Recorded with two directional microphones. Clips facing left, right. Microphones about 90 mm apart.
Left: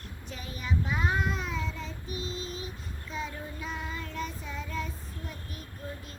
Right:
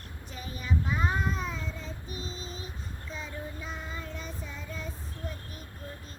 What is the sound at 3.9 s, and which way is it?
Child singing, 35° right (ahead or behind).